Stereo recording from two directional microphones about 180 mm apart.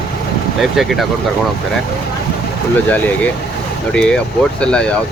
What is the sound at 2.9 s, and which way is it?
Speech, 10° left (ahead or behind).